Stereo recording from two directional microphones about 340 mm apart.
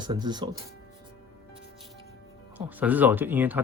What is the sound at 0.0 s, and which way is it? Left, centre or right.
Speech, centre.